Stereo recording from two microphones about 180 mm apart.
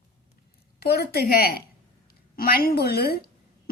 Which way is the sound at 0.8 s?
60° left (ahead or behind).